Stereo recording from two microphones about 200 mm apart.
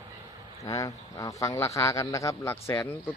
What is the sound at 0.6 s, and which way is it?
Speech, 15° left (ahead or behind).